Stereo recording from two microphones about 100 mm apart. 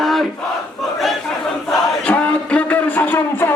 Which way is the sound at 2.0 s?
15° left (ahead or behind).